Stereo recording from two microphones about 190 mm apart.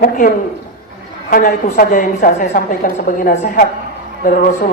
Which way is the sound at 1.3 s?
45° left (ahead or behind).